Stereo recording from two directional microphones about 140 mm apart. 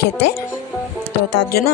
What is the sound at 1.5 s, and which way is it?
Speech, 90° left.